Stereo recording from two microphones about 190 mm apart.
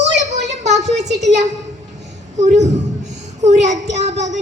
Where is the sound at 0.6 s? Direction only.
35° right (ahead or behind).